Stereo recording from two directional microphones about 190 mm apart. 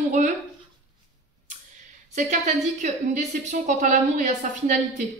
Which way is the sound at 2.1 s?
40° right (ahead or behind).